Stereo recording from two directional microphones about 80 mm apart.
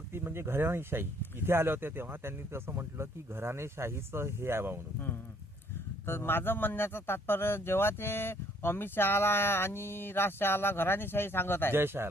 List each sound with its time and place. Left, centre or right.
0.1 s speech: right
4.9 s speech: left
11.7 s speech: right